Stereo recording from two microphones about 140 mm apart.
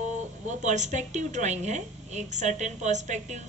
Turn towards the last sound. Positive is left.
turn(degrees=-55)  # may be behind; listen again after turning